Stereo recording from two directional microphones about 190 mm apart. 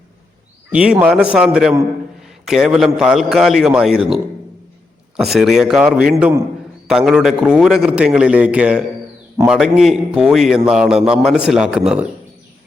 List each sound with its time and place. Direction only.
0.7 s a man's voice: 5° right (ahead or behind)